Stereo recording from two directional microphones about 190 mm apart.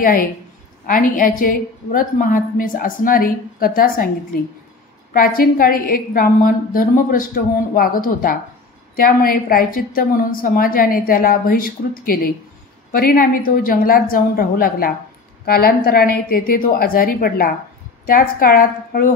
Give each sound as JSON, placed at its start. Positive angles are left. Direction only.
{"t": 0.0, "sound": "a woman's voice", "side_deg": 45}
{"t": 5.1, "sound": "a woman's voice", "side_deg": 50}